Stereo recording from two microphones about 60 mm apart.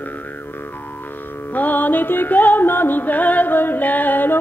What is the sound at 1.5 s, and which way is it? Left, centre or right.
Music, left.